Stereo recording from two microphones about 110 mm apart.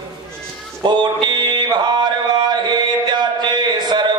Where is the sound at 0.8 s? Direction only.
45° right (ahead or behind).